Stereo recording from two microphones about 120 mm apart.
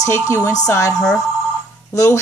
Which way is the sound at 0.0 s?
25° left (ahead or behind).